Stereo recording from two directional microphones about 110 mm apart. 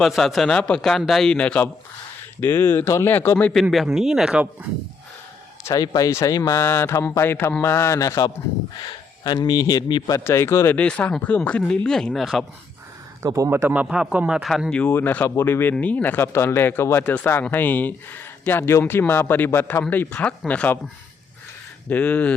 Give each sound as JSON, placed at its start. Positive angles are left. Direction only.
{"t": 0.0, "sound": "a man's voice", "side_deg": 0}
{"t": 3.5, "sound": "a man's voice", "side_deg": 0}
{"t": 5.6, "sound": "speech", "side_deg": 35}
{"t": 6.6, "sound": "speech", "side_deg": 20}
{"t": 10.2, "sound": "speech", "side_deg": 25}
{"t": 10.8, "sound": "a man's voice", "side_deg": 10}
{"t": 13.2, "sound": "speech", "side_deg": -30}
{"t": 13.8, "sound": "a man's voice", "side_deg": -10}
{"t": 14.7, "sound": "speech", "side_deg": 15}
{"t": 21.8, "sound": "speech", "side_deg": 15}